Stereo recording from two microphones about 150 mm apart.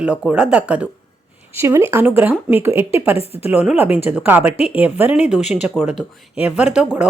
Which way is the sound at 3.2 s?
40° left (ahead or behind).